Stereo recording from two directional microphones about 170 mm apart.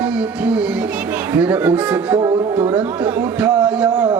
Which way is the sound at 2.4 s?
10° right (ahead or behind).